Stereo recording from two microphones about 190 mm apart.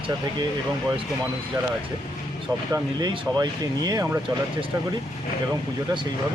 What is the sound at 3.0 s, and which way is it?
Speech, 20° right (ahead or behind).